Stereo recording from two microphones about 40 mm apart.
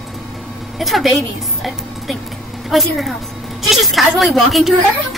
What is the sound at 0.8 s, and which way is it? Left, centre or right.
A woman's voice, centre.